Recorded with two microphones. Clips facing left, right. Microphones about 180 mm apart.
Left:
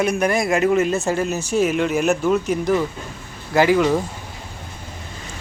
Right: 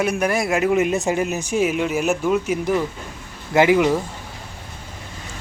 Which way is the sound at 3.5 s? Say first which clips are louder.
Right 1 dB; 20° right (ahead or behind).